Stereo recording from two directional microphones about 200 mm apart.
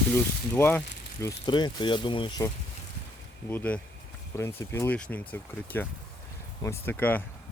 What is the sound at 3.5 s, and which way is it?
Speech, 10° left (ahead or behind).